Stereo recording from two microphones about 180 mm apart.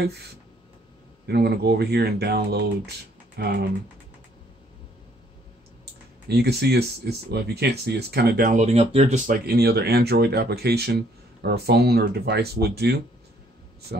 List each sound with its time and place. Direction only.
1.2 s speech: 65° right (ahead or behind)
6.2 s speech: 65° right (ahead or behind)
8.5 s speech: 35° right (ahead or behind)
9.2 s speech: 60° right (ahead or behind)